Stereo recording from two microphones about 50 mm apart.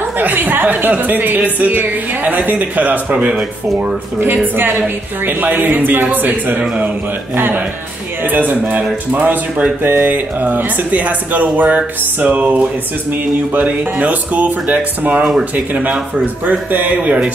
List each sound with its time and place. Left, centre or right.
0.2 s a woman's voice: right
4.2 s a woman's voice: right
7.3 s a woman's voice: right